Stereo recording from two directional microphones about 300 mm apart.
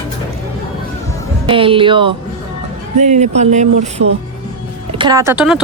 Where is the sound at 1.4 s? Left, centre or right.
Centre.